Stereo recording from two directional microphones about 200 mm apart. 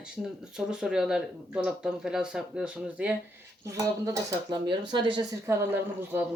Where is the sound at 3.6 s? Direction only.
15° right (ahead or behind).